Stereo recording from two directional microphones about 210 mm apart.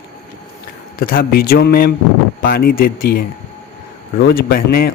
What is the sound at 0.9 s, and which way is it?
Speech, 45° left (ahead or behind).